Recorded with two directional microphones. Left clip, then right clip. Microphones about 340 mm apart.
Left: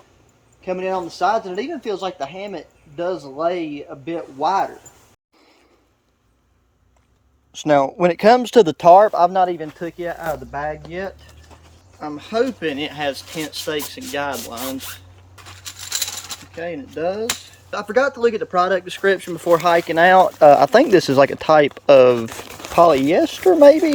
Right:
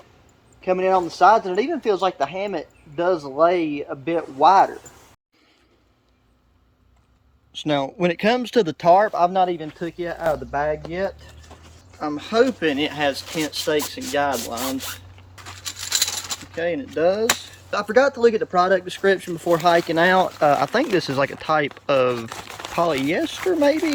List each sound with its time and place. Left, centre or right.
0.6 s speech: centre
7.5 s speech: centre